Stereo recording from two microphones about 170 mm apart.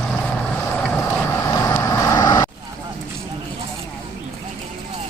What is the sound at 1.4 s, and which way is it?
Vehicle, 20° left (ahead or behind).